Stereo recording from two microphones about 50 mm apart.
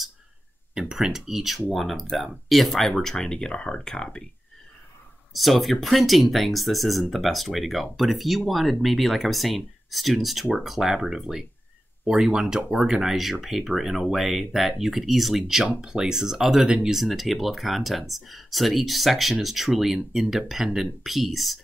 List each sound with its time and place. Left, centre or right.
0.7 s speech: centre
5.3 s speech: centre
16.6 s speech: centre
16.9 s speech: centre